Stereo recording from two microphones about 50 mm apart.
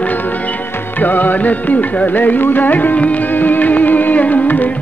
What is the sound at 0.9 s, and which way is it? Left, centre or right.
Music, left.